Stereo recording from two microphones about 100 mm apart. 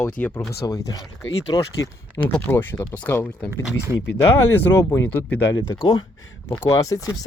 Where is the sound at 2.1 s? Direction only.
15° left (ahead or behind).